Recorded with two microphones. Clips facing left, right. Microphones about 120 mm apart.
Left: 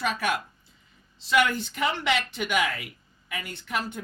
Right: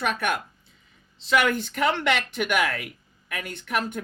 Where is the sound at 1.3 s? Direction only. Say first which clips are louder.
Right 1 dB; 65° right (ahead or behind).